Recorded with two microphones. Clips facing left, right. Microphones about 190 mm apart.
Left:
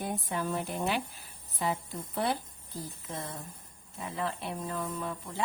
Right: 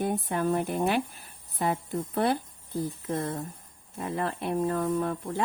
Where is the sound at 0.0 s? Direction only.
55° right (ahead or behind).